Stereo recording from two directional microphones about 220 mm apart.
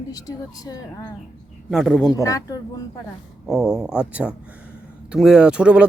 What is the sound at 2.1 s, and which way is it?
Speech, 15° left (ahead or behind).